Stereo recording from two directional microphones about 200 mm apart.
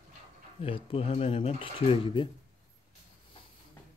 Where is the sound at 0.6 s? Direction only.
25° left (ahead or behind).